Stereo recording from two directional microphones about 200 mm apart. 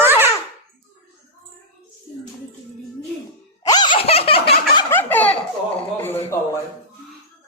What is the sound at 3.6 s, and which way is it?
Laughter, 20° left (ahead or behind).